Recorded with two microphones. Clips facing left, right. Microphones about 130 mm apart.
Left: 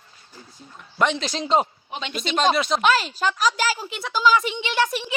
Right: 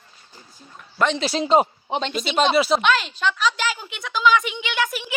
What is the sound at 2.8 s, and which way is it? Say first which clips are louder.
A woman's voice: left 1 dB; 40° left (ahead or behind).